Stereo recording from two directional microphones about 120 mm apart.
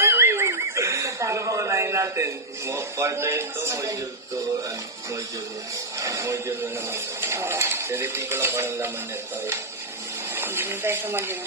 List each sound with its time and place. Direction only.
0.0 s a sound: 20° right (ahead or behind)
5.9 s speech: 25° right (ahead or behind)
10.3 s speech: 15° right (ahead or behind)